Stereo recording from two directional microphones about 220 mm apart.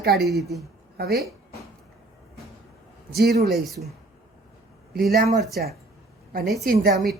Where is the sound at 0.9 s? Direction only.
45° right (ahead or behind).